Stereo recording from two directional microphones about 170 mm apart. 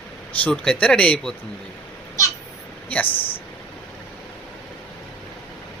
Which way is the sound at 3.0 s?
30° left (ahead or behind).